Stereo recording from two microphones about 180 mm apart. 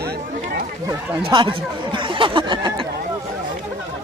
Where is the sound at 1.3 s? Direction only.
25° right (ahead or behind).